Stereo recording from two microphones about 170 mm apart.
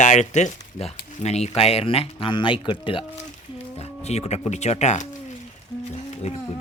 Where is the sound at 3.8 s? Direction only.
40° left (ahead or behind).